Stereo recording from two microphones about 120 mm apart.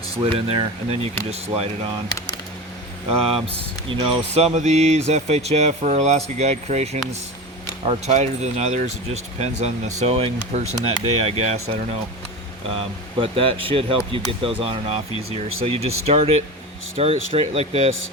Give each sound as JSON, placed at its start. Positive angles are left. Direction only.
{"t": 0.2, "sound": "speech", "side_deg": -55}
{"t": 3.1, "sound": "speech", "side_deg": -55}
{"t": 11.0, "sound": "speech", "side_deg": -55}
{"t": 12.7, "sound": "speech", "side_deg": -50}